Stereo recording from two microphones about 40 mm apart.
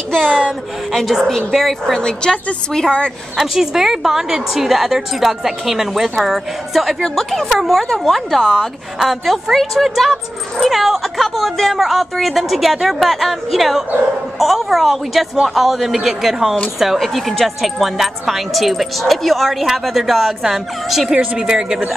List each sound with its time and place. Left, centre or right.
0.1 s a sound: centre
1.2 s a woman's voice: centre
2.0 s a woman's voice: centre
3.3 s a woman's voice: centre
7.0 s a woman's voice: centre
21.4 s a woman's voice: centre